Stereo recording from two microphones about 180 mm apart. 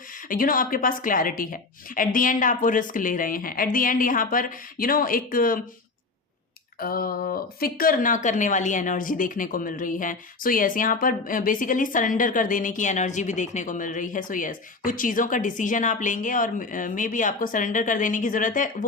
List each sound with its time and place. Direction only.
0.3 s speech: 50° left (ahead or behind)
6.7 s speech: 55° left (ahead or behind)